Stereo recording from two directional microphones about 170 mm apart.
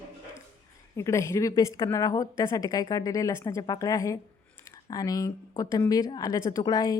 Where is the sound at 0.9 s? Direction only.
15° left (ahead or behind).